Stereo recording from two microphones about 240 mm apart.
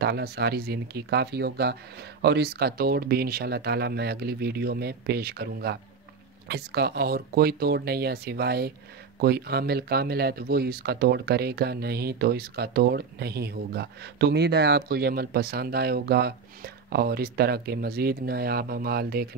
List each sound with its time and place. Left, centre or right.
0.0 s speech: right